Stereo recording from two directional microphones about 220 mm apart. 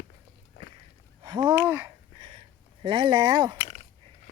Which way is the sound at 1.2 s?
20° right (ahead or behind).